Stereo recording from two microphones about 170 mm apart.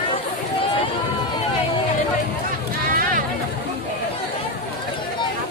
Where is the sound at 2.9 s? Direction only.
55° right (ahead or behind).